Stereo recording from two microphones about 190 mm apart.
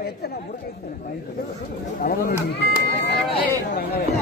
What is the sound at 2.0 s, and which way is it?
Speech, 45° left (ahead or behind).